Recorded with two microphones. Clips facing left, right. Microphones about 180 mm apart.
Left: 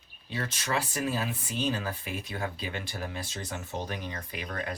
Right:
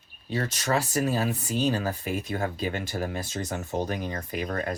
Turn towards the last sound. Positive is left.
turn(degrees=-45)  # may be behind; listen again after turning